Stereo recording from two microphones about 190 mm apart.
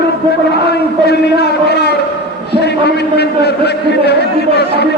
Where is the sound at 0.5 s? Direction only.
60° left (ahead or behind).